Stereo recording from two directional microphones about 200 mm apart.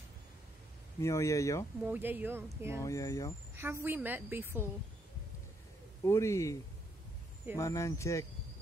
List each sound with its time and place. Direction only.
1.0 s speech: 15° left (ahead or behind)
1.8 s a woman's voice: 10° right (ahead or behind)
2.8 s speech: 15° left (ahead or behind)
3.5 s a woman's voice: 10° right (ahead or behind)
6.0 s speech: 15° left (ahead or behind)